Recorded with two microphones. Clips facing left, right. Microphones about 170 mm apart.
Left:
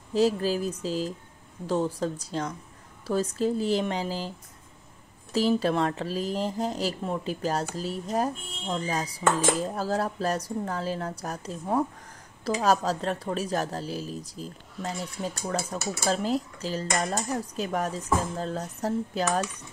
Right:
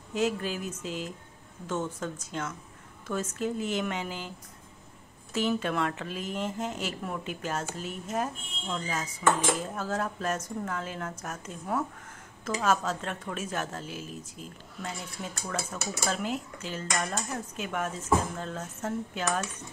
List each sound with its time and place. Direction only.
0.1 s speech: 35° left (ahead or behind)
5.3 s speech: 35° left (ahead or behind)